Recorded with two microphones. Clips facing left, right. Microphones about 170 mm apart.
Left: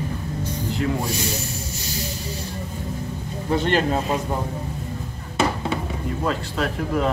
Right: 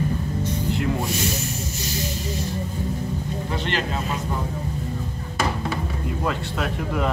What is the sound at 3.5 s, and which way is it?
Speech, 45° left (ahead or behind).